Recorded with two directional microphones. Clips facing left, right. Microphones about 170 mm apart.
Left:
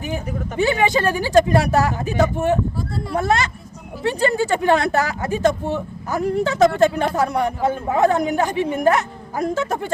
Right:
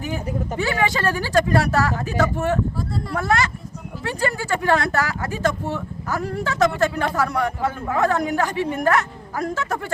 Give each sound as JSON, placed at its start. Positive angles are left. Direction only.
{"t": 0.6, "sound": "speech", "side_deg": 20}